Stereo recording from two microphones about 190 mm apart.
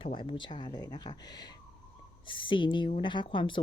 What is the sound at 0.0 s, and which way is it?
A woman's voice, 30° left (ahead or behind).